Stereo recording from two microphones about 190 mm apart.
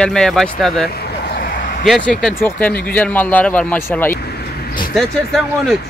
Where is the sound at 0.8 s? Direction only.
55° left (ahead or behind).